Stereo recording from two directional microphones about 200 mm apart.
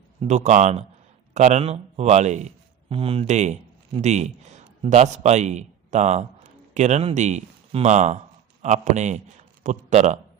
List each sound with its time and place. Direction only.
0.2 s speech: 35° right (ahead or behind)